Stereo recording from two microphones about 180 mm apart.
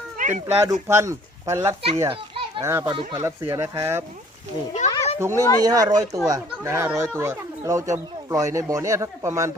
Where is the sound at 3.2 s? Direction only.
15° right (ahead or behind).